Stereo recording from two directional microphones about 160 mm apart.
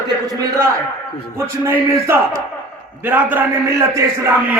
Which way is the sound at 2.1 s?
15° right (ahead or behind).